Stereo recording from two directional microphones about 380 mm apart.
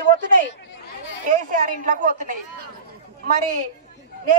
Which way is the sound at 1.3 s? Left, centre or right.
Centre.